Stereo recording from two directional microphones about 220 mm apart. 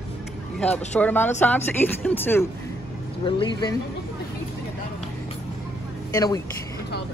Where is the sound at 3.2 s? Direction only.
20° left (ahead or behind).